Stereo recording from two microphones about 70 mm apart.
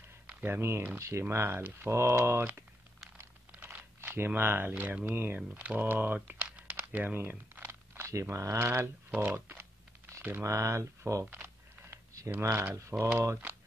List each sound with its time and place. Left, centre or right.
0.5 s speech: right
3.6 s typing: right
4.3 s speech: right
5.5 s speech: centre
10.4 s speech: right
11.2 s speech: right